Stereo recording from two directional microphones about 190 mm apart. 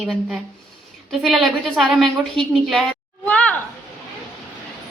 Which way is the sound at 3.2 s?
5° left (ahead or behind).